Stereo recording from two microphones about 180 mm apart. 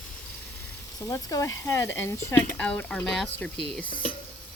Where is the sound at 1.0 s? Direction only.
20° left (ahead or behind); by 3.3 s centre (ahead or behind).